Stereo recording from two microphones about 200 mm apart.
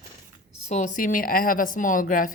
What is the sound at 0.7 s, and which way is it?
A woman's voice, 40° left (ahead or behind).